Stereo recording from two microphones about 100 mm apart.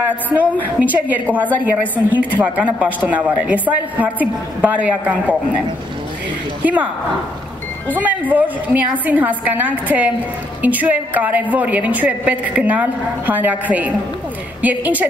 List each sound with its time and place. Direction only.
0.3 s a woman's voice: 15° right (ahead or behind)
6.6 s a woman's voice: 15° right (ahead or behind)
7.9 s a woman's voice: 15° right (ahead or behind)